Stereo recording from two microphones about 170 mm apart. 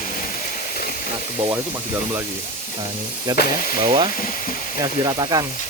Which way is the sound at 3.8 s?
30° right (ahead or behind).